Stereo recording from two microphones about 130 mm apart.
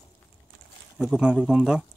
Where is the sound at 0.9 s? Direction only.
5° right (ahead or behind).